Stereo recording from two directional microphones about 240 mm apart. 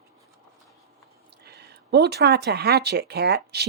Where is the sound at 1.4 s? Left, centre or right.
Right.